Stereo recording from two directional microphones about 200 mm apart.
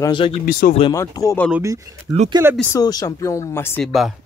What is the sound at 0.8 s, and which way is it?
Speech, 20° left (ahead or behind).